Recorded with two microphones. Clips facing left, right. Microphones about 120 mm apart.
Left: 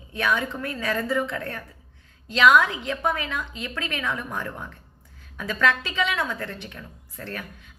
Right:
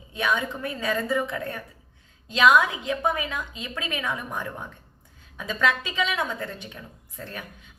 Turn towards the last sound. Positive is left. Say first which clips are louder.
# left 2 dB
turn(degrees=-20)  # may be behind; listen again after turning